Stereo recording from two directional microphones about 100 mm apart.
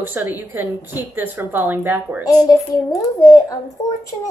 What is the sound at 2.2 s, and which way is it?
A child's voice, 40° left (ahead or behind).